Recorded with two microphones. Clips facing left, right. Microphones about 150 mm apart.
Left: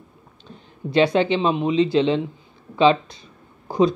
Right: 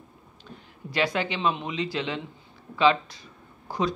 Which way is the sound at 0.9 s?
25° left (ahead or behind).